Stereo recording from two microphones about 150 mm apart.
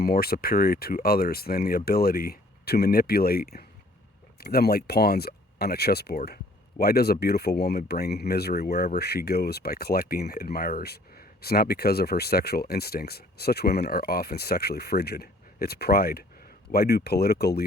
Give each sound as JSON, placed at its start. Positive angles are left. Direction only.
{"t": 0.0, "sound": "speech", "side_deg": 90}